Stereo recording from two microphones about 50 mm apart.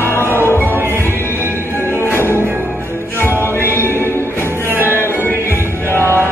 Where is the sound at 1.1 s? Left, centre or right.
Left.